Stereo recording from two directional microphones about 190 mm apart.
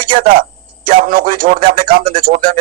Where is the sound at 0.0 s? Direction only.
50° right (ahead or behind).